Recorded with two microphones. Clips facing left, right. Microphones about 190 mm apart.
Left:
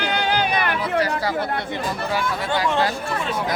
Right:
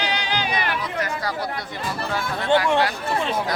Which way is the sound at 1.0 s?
30° left (ahead or behind).